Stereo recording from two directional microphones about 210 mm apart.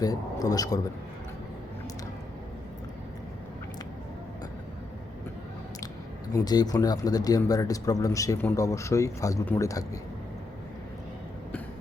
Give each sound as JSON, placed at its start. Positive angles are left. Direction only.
{"t": 0.0, "sound": "speech", "side_deg": 15}
{"t": 6.3, "sound": "speech", "side_deg": 20}